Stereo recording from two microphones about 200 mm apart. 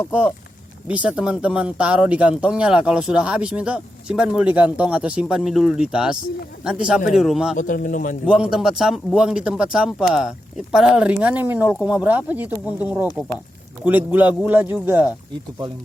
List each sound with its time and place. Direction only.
0.9 s speech: 5° right (ahead or behind)
7.5 s speech: 40° left (ahead or behind)
8.3 s speech: 5° right (ahead or behind)